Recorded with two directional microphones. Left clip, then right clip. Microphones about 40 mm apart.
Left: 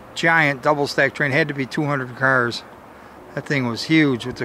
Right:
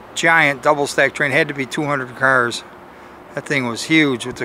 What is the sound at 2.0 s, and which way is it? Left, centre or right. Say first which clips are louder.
Speech: right 3 dB; right.